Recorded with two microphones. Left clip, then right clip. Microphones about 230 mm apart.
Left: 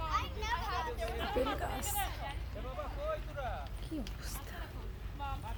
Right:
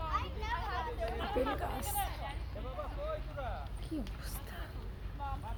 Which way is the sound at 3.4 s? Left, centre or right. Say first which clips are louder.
Left 1 dB; left.